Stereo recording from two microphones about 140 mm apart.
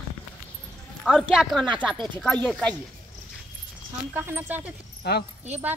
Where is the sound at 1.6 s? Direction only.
35° right (ahead or behind).